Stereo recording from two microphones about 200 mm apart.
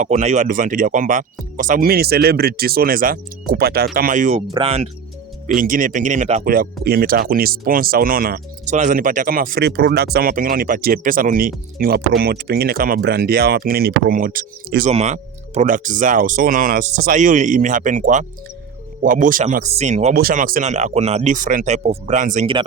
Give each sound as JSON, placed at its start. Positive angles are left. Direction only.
{"t": 0.0, "sound": "speech", "side_deg": -35}
{"t": 5.5, "sound": "speech", "side_deg": -40}
{"t": 14.8, "sound": "speech", "side_deg": -35}
{"t": 20.1, "sound": "speech", "side_deg": -45}